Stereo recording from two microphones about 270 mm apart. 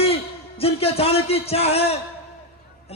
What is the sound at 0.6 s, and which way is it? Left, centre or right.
A man's voice, left.